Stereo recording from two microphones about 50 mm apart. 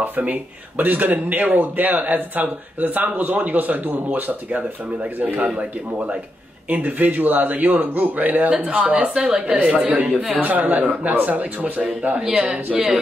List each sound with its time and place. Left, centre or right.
0.2 s speech: right
10.3 s speech: right
12.2 s speech: centre